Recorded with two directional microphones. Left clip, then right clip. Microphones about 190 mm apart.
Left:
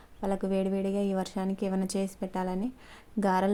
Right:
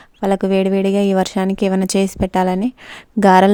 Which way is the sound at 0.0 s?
50° right (ahead or behind).